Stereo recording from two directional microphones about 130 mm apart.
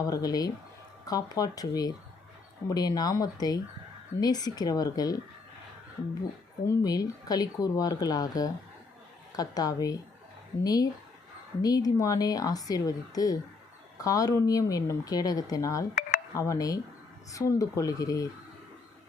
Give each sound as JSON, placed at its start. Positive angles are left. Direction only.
{"t": 0.0, "sound": "speech", "side_deg": 30}
{"t": 6.7, "sound": "speech", "side_deg": 30}